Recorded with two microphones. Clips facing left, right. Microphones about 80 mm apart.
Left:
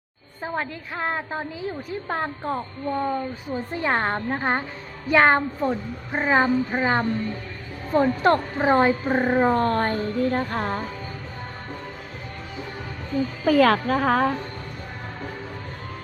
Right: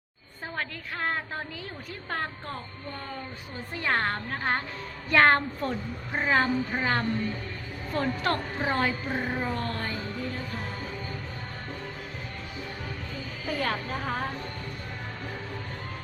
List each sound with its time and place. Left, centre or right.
0.4 s a woman's voice: centre; by 10.8 s left
13.5 s a woman's voice: left